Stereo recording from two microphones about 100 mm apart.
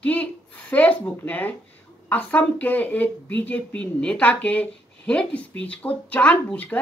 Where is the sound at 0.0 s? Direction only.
15° left (ahead or behind).